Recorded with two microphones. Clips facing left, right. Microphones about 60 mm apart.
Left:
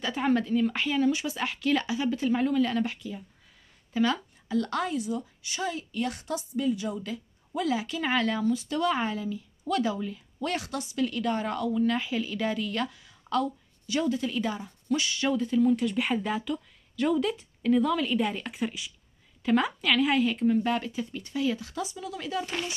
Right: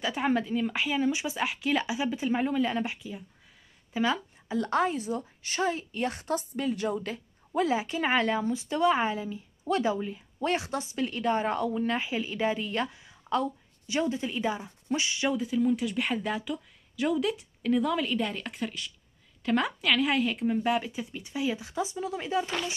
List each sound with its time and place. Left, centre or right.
0.0 s a woman's voice: centre; by 7.6 s right
7.6 s speech: right